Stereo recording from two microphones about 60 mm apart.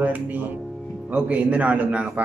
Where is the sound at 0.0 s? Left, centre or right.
Right.